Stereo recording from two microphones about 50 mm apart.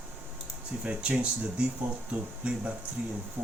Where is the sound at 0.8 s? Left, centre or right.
Right.